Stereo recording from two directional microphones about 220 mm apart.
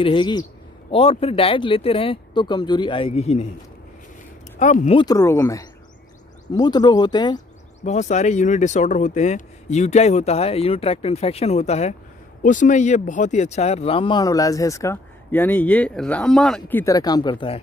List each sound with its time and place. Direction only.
0.0 s speech: 20° left (ahead or behind)
4.6 s speech: 35° left (ahead or behind)
4.9 s speech: 15° left (ahead or behind)
7.8 s speech: 30° left (ahead or behind)